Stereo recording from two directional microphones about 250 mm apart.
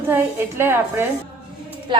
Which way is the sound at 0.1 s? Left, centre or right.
Centre.